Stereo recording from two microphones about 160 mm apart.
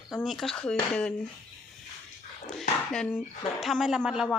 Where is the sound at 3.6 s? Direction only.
Centre (ahead or behind).